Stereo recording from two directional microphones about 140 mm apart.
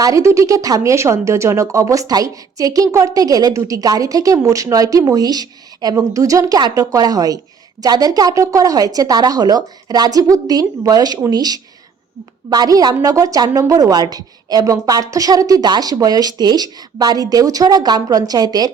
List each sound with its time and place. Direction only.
0.0 s speech: 20° right (ahead or behind)